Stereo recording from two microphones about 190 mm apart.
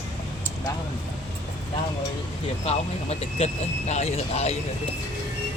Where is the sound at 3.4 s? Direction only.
30° left (ahead or behind).